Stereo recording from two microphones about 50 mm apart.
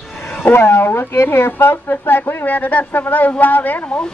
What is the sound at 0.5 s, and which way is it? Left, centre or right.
Speech, left.